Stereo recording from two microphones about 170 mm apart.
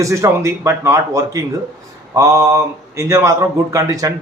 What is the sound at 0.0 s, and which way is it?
A man's voice, 20° right (ahead or behind).